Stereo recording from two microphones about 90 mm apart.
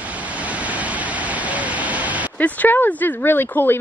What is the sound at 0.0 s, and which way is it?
Vehicle, 15° right (ahead or behind).